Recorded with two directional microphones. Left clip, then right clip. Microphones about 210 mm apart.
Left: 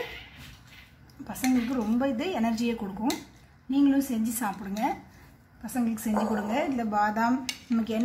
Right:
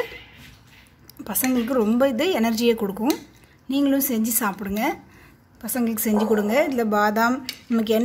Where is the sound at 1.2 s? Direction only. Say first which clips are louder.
Right 4 dB; 45° right (ahead or behind).